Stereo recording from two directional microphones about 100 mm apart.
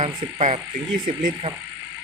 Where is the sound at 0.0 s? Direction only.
80° right.